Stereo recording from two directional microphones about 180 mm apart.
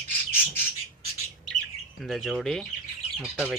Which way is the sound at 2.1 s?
Centre (ahead or behind).